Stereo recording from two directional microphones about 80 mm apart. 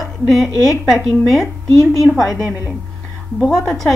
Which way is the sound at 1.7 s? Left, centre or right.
Left.